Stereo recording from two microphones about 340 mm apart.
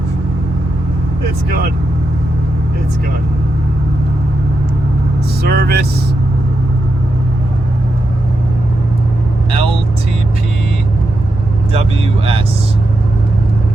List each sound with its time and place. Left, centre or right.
5.4 s speech: right
9.5 s vehicle: centre
11.7 s speech: centre